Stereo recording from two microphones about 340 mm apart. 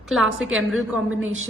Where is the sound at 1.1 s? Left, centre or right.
Right.